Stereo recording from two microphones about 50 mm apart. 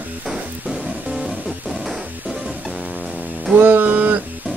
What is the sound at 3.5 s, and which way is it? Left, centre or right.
Speech, right.